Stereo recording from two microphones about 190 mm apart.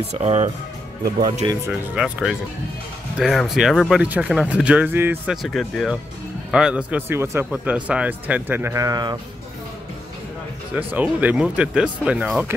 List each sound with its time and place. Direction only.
0.1 s speech: 35° right (ahead or behind)
1.7 s a man's voice: 5° right (ahead or behind); by 9.2 s 20° right (ahead or behind)
10.7 s a man's voice: 10° right (ahead or behind)